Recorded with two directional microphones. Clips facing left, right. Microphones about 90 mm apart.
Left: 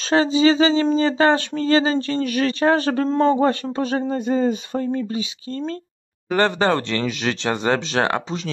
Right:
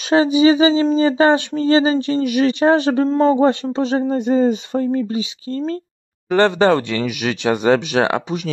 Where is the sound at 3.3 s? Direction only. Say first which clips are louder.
Right 4 dB; 20° right (ahead or behind).